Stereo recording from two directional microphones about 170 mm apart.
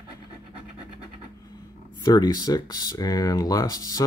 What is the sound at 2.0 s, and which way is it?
Speech, 25° left (ahead or behind).